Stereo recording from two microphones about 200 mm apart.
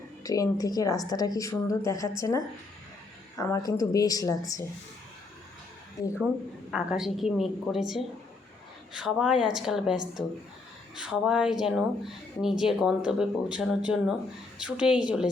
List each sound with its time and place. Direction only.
0.2 s a woman's voice: 15° left (ahead or behind)
6.1 s speech: 5° right (ahead or behind)